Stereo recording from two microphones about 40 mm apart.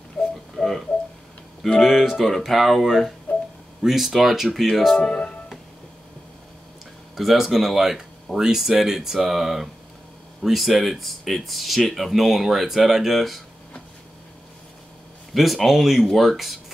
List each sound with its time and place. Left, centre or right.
0.2 s a sound: centre
1.8 s speech: centre
4.9 s speech: left
7.2 s speech: centre
15.3 s speech: centre